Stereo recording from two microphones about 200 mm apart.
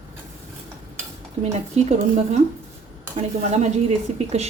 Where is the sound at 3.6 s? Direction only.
35° right (ahead or behind).